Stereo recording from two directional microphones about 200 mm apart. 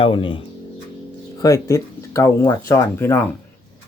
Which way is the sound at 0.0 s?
25° left (ahead or behind).